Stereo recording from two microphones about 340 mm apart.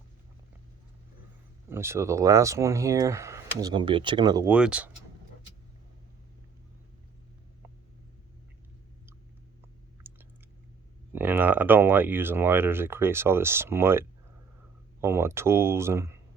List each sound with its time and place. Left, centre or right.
1.7 s speech: centre
10.0 s chewing: centre
11.1 s speech: centre